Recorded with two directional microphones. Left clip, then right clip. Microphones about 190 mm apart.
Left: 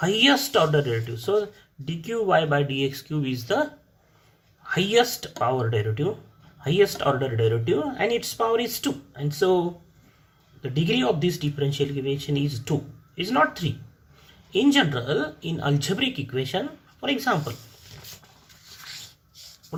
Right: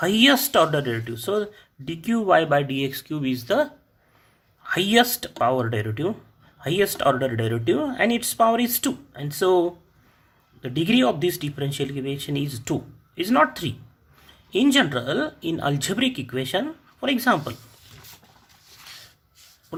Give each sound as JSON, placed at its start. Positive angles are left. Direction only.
{"t": 0.0, "sound": "speech", "side_deg": -45}